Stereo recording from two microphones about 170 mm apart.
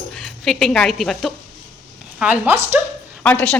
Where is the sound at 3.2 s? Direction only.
5° left (ahead or behind).